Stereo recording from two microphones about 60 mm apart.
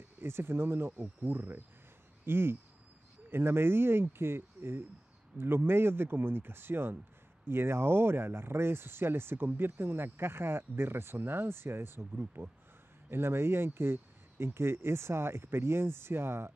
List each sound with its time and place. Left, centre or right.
0.2 s speech: right